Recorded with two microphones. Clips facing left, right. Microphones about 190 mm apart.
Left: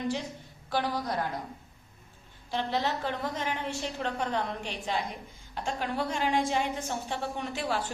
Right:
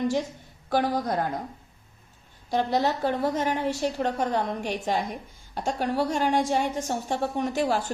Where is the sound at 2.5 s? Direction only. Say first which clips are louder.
Right 6 dB; 40° right (ahead or behind).